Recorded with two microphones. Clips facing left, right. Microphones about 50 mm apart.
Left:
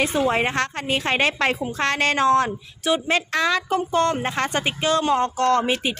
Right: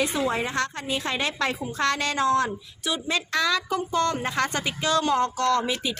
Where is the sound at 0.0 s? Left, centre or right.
Left.